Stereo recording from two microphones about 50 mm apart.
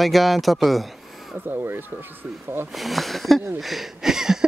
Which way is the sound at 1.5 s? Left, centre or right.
Right.